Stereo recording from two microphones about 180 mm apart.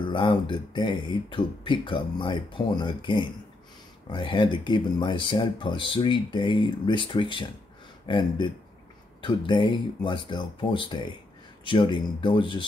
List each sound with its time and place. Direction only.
0.1 s speech: 25° left (ahead or behind)